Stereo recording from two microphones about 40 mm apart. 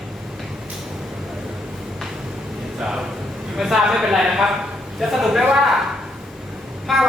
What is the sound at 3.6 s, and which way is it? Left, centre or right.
A man's voice, centre.